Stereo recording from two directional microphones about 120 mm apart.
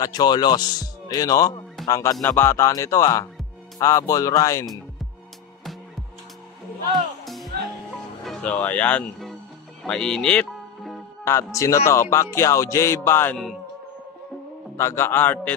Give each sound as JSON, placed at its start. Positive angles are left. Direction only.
{"t": 0.0, "sound": "speech", "side_deg": 35}
{"t": 8.2, "sound": "music", "side_deg": 0}
{"t": 8.5, "sound": "speech", "side_deg": 10}
{"t": 9.8, "sound": "music", "side_deg": 5}
{"t": 11.2, "sound": "speech", "side_deg": 25}
{"t": 14.8, "sound": "speech", "side_deg": 20}